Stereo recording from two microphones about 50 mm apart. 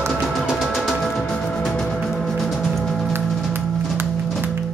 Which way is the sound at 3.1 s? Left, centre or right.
Right.